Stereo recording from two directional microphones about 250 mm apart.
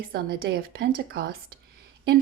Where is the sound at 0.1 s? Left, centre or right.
Right.